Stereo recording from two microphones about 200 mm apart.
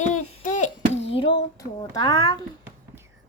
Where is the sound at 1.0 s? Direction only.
30° left (ahead or behind).